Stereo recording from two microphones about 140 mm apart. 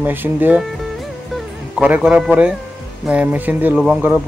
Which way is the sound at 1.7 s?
5° right (ahead or behind).